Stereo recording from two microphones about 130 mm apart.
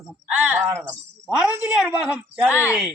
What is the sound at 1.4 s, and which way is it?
A woman's voice, 10° right (ahead or behind).